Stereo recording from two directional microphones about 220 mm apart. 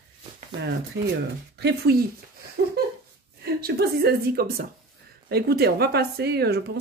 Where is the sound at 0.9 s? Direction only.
50° right (ahead or behind).